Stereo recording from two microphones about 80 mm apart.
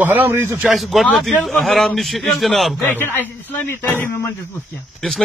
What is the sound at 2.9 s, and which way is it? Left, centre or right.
A man's voice, left.